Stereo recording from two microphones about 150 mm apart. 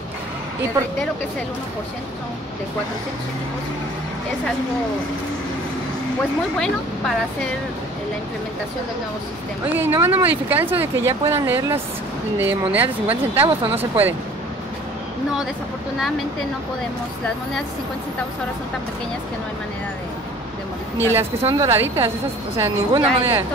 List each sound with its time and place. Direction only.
9.8 s speech: 15° right (ahead or behind)
21.0 s speech: 15° right (ahead or behind)